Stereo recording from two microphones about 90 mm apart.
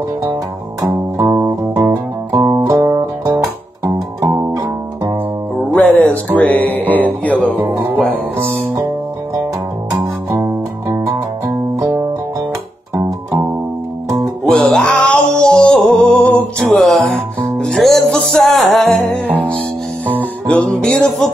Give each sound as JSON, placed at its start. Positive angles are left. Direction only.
{"t": 1.3, "sound": "music", "side_deg": -35}
{"t": 5.8, "sound": "music", "side_deg": 15}
{"t": 7.6, "sound": "music", "side_deg": -25}
{"t": 10.3, "sound": "music", "side_deg": -30}
{"t": 14.0, "sound": "music", "side_deg": -40}
{"t": 14.4, "sound": "music", "side_deg": 5}
{"t": 20.4, "sound": "music", "side_deg": 10}